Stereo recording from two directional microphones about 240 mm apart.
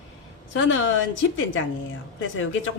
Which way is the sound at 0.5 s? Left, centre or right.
Left.